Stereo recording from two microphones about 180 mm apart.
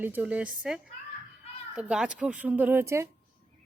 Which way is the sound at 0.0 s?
10° right (ahead or behind).